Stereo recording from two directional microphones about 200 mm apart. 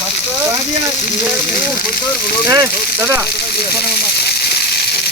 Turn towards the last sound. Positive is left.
turn(degrees=-15)  # may be behind; listen again after turning